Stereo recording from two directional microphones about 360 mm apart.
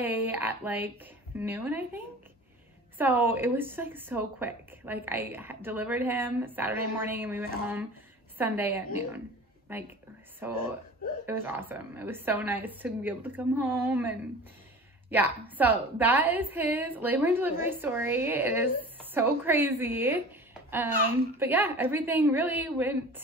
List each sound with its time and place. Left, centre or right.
0.0 s a woman's voice: centre
3.0 s a woman's voice: centre
10.4 s a woman's voice: centre